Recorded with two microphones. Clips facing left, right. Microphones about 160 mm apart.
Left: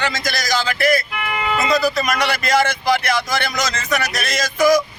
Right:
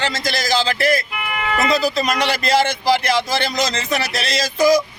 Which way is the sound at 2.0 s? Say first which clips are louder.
Right 1 dB; 30° right (ahead or behind).